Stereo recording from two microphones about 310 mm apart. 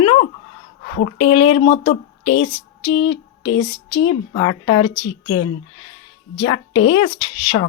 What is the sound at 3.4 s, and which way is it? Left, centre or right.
Female singing, centre.